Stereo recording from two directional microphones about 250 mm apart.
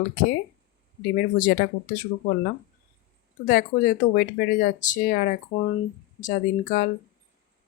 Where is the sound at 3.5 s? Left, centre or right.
Left.